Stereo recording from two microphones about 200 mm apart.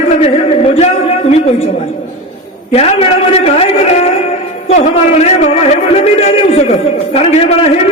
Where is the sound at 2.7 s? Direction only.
30° left (ahead or behind).